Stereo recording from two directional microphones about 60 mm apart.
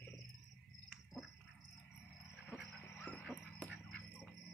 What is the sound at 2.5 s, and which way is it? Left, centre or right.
Cricket, centre.